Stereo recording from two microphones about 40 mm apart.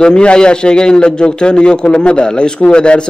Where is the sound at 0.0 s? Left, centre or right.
Left.